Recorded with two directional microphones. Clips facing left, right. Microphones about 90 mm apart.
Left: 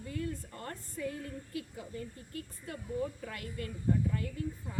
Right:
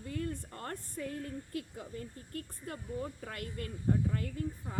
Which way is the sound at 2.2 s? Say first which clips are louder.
Right 1 dB; 50° right (ahead or behind).